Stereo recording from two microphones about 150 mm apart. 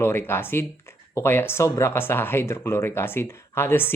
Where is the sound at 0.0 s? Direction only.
15° left (ahead or behind).